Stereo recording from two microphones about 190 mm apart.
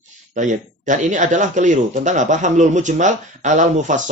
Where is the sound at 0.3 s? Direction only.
40° right (ahead or behind).